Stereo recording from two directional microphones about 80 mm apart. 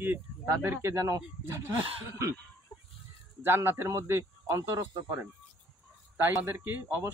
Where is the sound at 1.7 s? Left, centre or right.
Right.